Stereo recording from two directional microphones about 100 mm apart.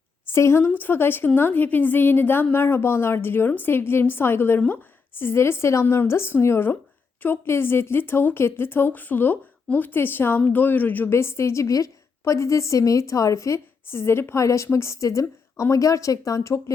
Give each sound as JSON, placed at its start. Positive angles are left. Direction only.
{"t": 0.3, "sound": "speech", "side_deg": 25}